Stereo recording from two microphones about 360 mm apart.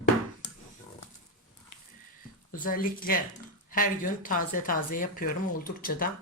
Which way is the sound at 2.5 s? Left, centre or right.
Left.